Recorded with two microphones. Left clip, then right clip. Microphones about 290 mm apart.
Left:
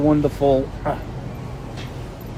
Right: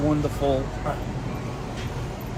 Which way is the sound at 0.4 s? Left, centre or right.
Left.